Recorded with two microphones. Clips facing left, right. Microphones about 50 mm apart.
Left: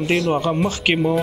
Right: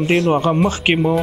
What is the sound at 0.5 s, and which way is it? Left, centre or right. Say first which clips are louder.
Speech: right 3 dB; centre.